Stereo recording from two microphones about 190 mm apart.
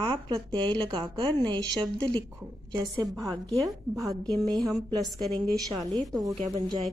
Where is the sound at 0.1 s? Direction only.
25° right (ahead or behind).